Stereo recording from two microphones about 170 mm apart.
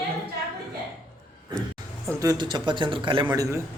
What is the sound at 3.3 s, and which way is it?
Speech, 15° right (ahead or behind).